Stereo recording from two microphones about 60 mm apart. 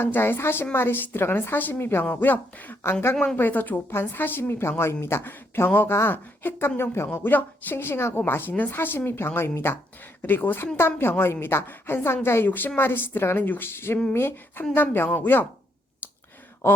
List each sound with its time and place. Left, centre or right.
0.0 s a woman's voice: left
3.8 s a woman's voice: left